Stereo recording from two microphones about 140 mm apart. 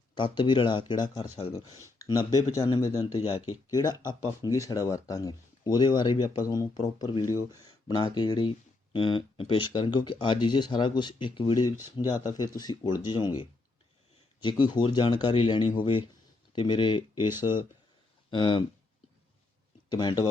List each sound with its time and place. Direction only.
0.1 s speech: 35° left (ahead or behind)
19.9 s speech: 30° left (ahead or behind)